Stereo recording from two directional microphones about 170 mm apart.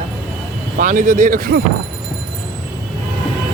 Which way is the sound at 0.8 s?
50° right (ahead or behind).